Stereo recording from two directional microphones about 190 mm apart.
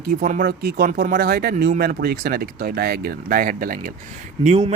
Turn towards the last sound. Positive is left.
turn(degrees=-35)  # may be behind; listen again after turning